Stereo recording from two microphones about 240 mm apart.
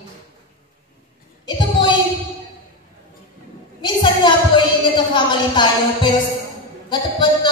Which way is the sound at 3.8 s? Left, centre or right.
Centre.